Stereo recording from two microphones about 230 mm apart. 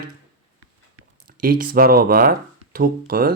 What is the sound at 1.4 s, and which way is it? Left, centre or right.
Speech, right.